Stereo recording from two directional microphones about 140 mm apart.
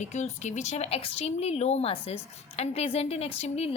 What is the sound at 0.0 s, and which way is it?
A woman's voice, 55° left (ahead or behind).